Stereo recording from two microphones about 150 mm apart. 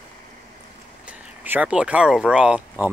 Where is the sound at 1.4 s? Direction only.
10° right (ahead or behind).